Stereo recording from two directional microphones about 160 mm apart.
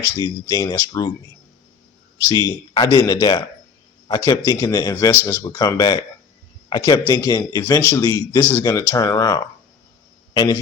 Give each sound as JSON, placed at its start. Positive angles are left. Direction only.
{"t": 0.2, "sound": "speech", "side_deg": 25}
{"t": 2.3, "sound": "a man's voice", "side_deg": 25}